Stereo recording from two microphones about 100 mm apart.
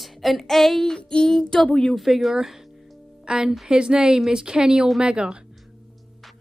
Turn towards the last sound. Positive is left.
turn(degrees=-10)  # may be behind; listen again after turning